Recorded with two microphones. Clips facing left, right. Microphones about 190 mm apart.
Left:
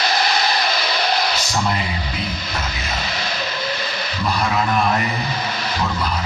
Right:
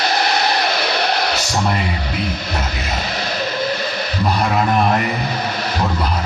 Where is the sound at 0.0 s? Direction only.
60° right (ahead or behind).